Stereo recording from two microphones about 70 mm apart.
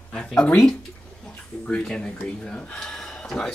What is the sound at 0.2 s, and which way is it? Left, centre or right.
Speech, centre.